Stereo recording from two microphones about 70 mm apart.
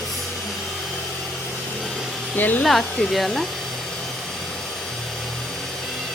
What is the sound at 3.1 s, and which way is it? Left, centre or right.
Speech, centre.